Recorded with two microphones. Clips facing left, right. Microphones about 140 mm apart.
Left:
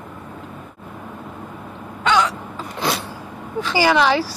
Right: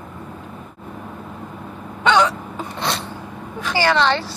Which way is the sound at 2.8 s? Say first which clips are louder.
Left 2 dB; 5° left (ahead or behind).